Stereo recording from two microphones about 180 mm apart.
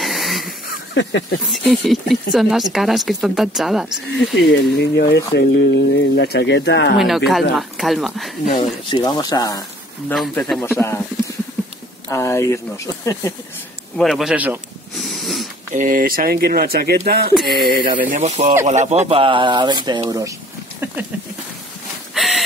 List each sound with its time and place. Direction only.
0.0 s wheeze: centre (ahead or behind)
0.7 s a sound: 75° left (ahead or behind)
1.5 s speech: centre (ahead or behind)
4.3 s speech: 65° left (ahead or behind)
7.0 s speech: centre (ahead or behind)
8.5 s speech: 20° left (ahead or behind)
10.3 s speech: 10° left (ahead or behind)
12.1 s speech: 15° left (ahead or behind)
13.9 s speech: centre (ahead or behind)
15.7 s speech: 45° right (ahead or behind)
17.6 s speech: centre (ahead or behind)
18.1 s speech: 40° right (ahead or behind); by 20.3 s 20° right (ahead or behind)
22.1 s a sound: centre (ahead or behind)